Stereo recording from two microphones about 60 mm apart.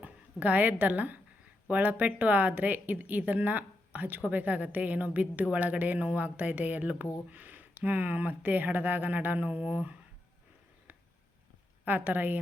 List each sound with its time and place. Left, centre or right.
0.0 s a woman's voice: right
11.9 s a woman's voice: right